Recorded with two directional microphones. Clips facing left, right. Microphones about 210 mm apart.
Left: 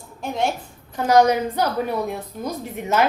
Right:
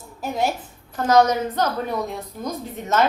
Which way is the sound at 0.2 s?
5° right (ahead or behind).